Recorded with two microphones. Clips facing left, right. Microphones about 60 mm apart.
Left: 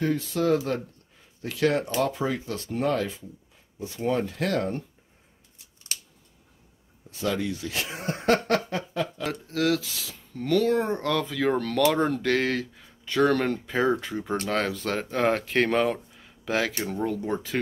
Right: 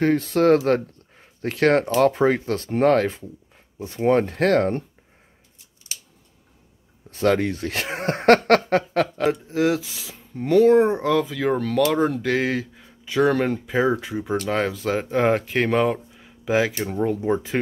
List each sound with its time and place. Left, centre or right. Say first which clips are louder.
0.0 s speech: right 7 dB; right
7.1 s speech: right 8 dB; right
9.3 s speech: right 4 dB; right